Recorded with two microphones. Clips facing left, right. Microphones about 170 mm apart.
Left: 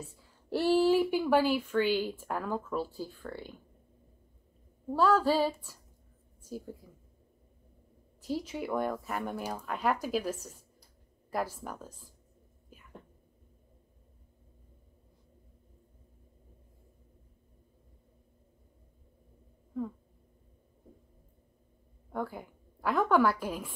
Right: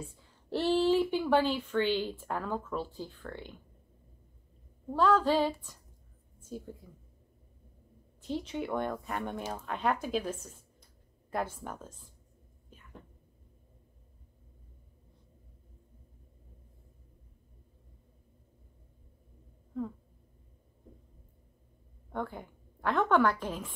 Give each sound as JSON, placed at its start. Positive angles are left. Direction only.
{"t": 0.5, "sound": "a sound", "side_deg": 10}
{"t": 1.2, "sound": "a woman's voice", "side_deg": 10}
{"t": 4.9, "sound": "a woman's voice", "side_deg": 10}
{"t": 8.3, "sound": "speech", "side_deg": 5}
{"t": 11.5, "sound": "speech", "side_deg": 5}
{"t": 22.1, "sound": "a woman's voice", "side_deg": 5}